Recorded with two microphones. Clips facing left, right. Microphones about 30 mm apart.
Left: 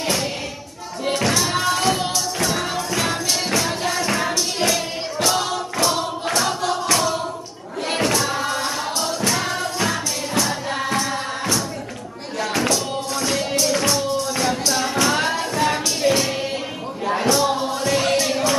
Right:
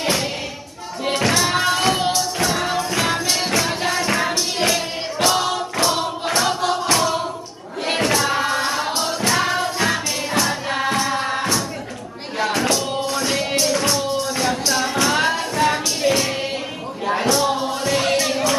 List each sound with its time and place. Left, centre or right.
1.0 s music: centre
12.6 s music: centre